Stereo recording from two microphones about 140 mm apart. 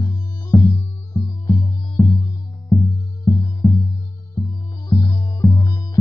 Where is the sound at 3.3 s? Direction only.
25° left (ahead or behind).